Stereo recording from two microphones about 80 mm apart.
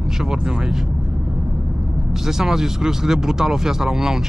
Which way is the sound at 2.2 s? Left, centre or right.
Centre.